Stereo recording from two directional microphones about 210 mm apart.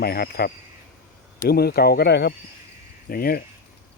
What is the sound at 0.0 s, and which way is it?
Speech, 45° left (ahead or behind).